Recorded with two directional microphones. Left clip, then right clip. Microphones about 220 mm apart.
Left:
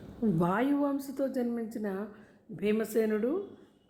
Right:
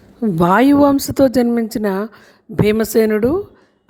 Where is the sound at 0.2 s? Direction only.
45° right (ahead or behind).